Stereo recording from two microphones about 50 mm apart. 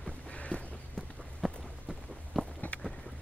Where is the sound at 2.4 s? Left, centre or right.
Centre.